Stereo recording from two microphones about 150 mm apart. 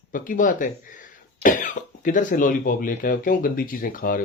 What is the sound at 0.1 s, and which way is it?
Speech, 60° left (ahead or behind).